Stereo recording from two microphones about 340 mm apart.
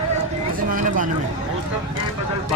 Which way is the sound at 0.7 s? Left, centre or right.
Right.